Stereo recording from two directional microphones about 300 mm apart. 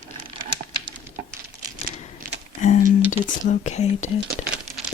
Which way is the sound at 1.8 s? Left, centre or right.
Right.